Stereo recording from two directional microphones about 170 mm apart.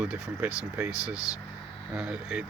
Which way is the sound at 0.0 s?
10° right (ahead or behind).